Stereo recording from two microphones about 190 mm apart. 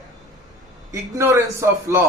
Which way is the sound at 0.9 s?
15° right (ahead or behind).